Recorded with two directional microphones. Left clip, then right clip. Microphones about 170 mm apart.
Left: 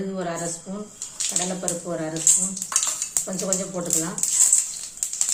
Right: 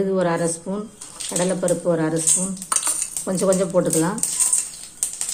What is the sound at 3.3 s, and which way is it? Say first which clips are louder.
Stir: right 7 dB; 75° right (ahead or behind).